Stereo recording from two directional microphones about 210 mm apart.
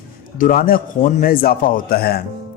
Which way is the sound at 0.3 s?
40° left (ahead or behind).